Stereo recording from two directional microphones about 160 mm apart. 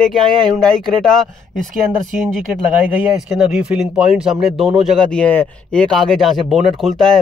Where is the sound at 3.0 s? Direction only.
5° right (ahead or behind).